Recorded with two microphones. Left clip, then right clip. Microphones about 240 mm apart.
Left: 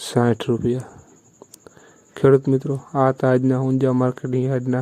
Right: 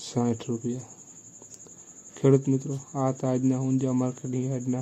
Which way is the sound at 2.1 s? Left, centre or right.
Left.